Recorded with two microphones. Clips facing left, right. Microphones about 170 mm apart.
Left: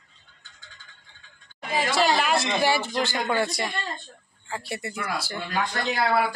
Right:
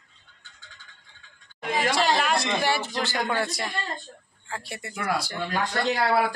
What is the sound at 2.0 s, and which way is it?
A man's voice, 5° left (ahead or behind).